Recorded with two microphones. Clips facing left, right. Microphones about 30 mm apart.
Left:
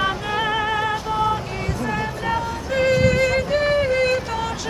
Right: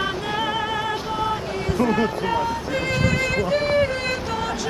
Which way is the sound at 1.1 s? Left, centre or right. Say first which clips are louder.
Left 2 dB; centre.